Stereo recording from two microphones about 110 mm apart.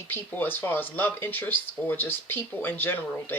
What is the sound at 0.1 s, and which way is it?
Speech, 20° left (ahead or behind).